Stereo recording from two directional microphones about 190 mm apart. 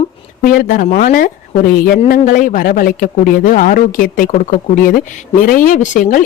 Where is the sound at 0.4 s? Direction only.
50° left (ahead or behind).